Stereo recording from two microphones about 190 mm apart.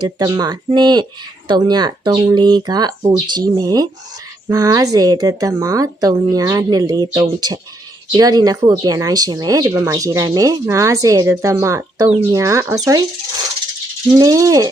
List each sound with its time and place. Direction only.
0.0 s a woman's voice: 20° right (ahead or behind)